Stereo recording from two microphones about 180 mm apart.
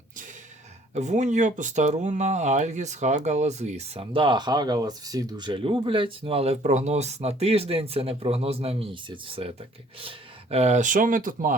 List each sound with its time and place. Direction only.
0.9 s speech: 40° right (ahead or behind)